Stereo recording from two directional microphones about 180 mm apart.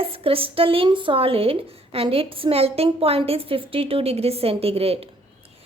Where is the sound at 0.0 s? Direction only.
30° right (ahead or behind).